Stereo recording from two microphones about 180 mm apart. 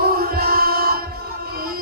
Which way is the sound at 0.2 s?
55° right (ahead or behind).